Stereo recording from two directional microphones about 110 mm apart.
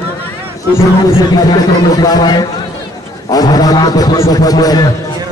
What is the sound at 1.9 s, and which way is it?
A man's voice, 35° left (ahead or behind).